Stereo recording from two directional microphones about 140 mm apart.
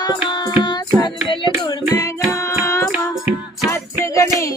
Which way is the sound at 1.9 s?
20° left (ahead or behind).